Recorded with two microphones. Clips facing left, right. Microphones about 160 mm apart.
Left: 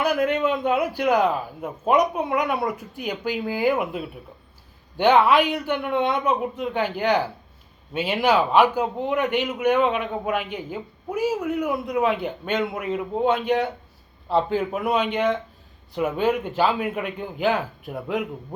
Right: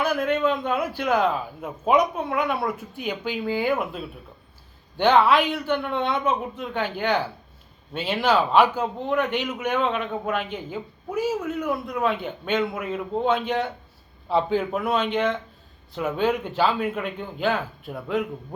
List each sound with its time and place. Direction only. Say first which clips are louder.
0.3 s a man's voice: left 1 dB; 15° left (ahead or behind)
1.6 s a man's voice: even; centre (ahead or behind)
2.0 s a man's voice: left 1 dB; 15° left (ahead or behind)
4.9 s a man's voice: left 1 dB; 10° left (ahead or behind)
11.7 s a man's voice: left 1 dB; centre (ahead or behind)
14.3 s a man's voice: even; centre (ahead or behind)